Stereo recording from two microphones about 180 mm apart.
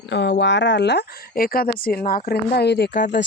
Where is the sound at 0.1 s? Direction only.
75° left (ahead or behind).